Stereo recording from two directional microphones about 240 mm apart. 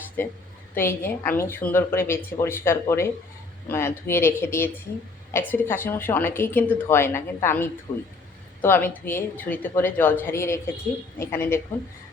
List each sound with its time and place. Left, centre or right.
0.2 s a woman's voice: centre
7.9 s a man's voice: left
8.6 s a woman's voice: centre